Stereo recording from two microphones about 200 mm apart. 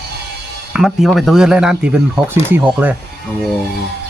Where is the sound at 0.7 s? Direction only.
Centre (ahead or behind).